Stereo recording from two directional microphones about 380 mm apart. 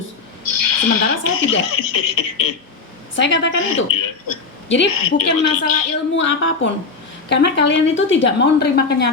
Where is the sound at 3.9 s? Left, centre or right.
Left.